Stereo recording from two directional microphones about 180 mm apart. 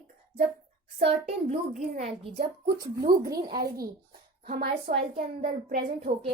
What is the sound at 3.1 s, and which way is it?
A woman's voice, 55° right (ahead or behind).